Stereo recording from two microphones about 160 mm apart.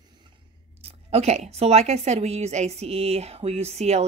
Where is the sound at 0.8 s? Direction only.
40° right (ahead or behind).